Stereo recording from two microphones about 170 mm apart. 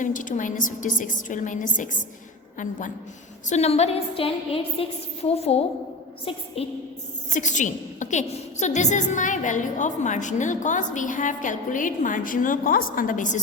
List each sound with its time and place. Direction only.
0.0 s a woman's voice: 50° left (ahead or behind)
3.5 s a woman's voice: 40° left (ahead or behind)
7.3 s a woman's voice: 45° left (ahead or behind)